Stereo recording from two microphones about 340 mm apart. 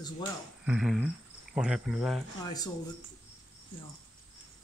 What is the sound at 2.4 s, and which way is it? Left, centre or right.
Speech, centre.